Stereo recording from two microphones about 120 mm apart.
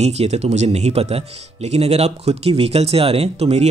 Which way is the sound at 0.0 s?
65° right (ahead or behind).